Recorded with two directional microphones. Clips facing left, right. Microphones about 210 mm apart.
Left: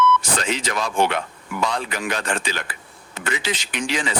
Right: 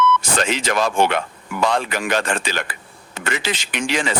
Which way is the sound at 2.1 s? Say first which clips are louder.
Right 5 dB; 80° right.